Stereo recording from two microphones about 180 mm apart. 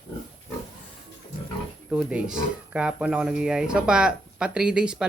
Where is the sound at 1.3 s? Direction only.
50° left (ahead or behind).